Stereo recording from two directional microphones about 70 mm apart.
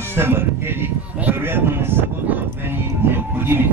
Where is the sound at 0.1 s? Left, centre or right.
Right.